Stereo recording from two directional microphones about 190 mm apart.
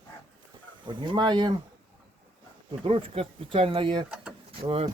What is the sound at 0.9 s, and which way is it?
Speech, 25° right (ahead or behind).